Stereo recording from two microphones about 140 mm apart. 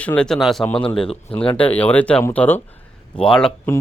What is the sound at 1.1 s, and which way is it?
Speech, 40° left (ahead or behind).